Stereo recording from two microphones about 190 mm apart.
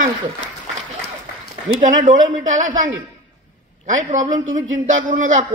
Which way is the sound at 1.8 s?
45° right (ahead or behind).